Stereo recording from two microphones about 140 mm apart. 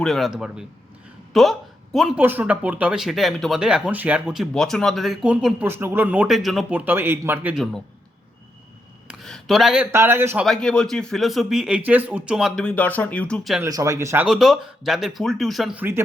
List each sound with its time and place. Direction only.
0.0 s speech: centre (ahead or behind)
2.2 s a man's voice: 10° right (ahead or behind)
7.5 s speech: 5° left (ahead or behind)
9.0 s a sound: centre (ahead or behind)
9.9 s a man's voice: 20° right (ahead or behind)
10.4 s speech: 5° left (ahead or behind)
12.6 s speech: 10° left (ahead or behind)
13.7 s speech: 25° right (ahead or behind)
14.3 s speech: centre (ahead or behind)
15.7 s a man's voice: 15° right (ahead or behind)